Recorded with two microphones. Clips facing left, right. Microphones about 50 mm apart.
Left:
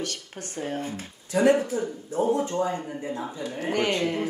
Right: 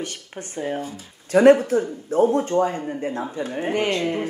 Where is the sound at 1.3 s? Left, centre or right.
Right.